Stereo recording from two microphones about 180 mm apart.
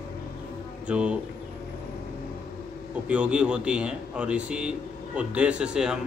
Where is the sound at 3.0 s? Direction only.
5° right (ahead or behind).